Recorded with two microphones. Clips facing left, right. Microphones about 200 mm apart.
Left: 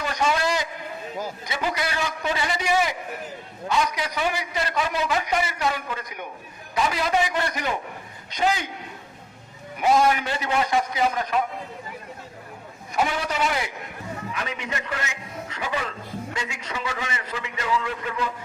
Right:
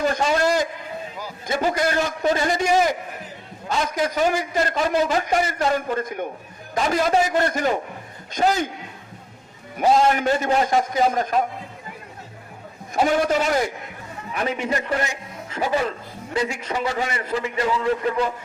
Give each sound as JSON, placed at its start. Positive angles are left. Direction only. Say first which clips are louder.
{"t": 0.0, "sound": "a man's voice", "louder": "right 4 dB", "side_deg": -40}
{"t": 10.1, "sound": "a man's voice", "louder": "right 5 dB", "side_deg": -45}
{"t": 13.1, "sound": "a man's voice", "louder": "right 6 dB", "side_deg": -45}